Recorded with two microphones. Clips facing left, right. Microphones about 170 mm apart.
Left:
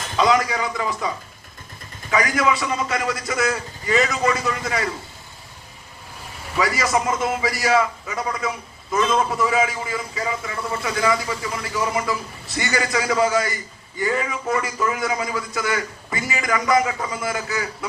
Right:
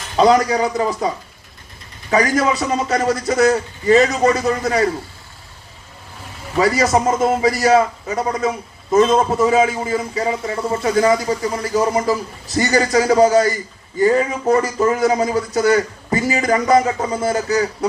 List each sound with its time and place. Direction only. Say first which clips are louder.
0.2 s a man's voice: right 6 dB; 35° right (ahead or behind)
6.6 s a man's voice: right 6 dB; 30° right (ahead or behind)